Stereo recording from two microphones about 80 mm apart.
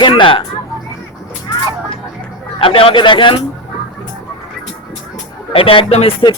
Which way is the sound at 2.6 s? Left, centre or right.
Left.